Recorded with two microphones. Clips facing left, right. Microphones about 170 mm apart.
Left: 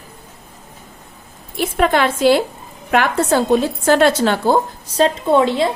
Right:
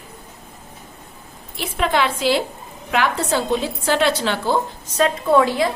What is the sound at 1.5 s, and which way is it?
A woman's voice, 50° left (ahead or behind).